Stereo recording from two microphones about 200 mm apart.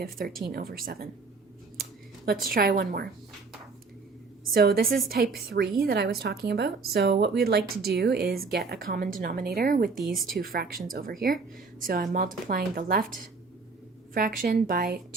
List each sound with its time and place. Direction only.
0.0 s speech: 50° right (ahead or behind)
2.2 s speech: 45° right (ahead or behind)
4.5 s speech: 45° right (ahead or behind)
14.1 s speech: 45° right (ahead or behind)